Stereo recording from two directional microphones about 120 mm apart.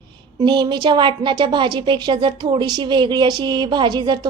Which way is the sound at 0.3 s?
40° right (ahead or behind).